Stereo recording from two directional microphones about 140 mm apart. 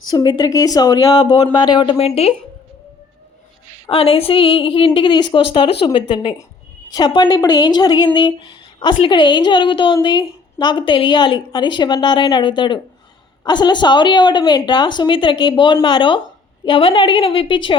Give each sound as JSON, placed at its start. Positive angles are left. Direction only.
{"t": 0.0, "sound": "speech", "side_deg": 30}
{"t": 3.8, "sound": "speech", "side_deg": 40}